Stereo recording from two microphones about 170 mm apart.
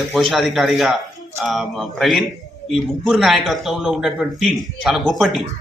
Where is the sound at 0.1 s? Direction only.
Centre (ahead or behind).